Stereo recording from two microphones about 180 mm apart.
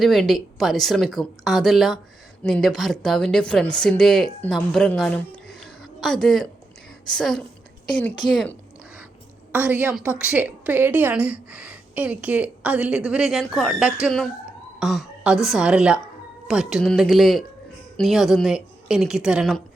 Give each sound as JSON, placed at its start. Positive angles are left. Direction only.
{"t": 0.0, "sound": "a woman's voice", "side_deg": 0}
{"t": 8.2, "sound": "speech", "side_deg": 25}
{"t": 9.5, "sound": "a woman's voice", "side_deg": -10}